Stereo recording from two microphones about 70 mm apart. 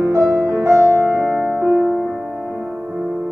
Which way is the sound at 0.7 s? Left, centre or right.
Right.